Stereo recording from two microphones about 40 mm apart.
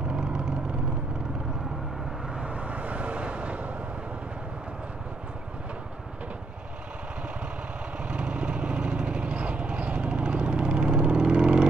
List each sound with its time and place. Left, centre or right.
0.1 s vehicle: centre
2.4 s vehicle: right
8.1 s vehicle: right